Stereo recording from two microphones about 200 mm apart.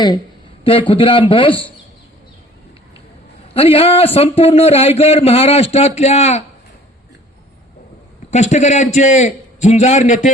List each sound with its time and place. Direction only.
0.6 s a man's voice: 25° left (ahead or behind)
3.5 s a man's voice: 30° left (ahead or behind)
8.3 s a man's voice: 35° left (ahead or behind)